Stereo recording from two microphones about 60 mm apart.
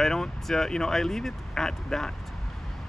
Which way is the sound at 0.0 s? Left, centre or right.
Centre.